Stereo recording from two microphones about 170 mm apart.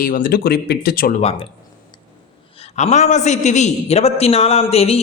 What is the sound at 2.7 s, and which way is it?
A man's voice, 45° left (ahead or behind).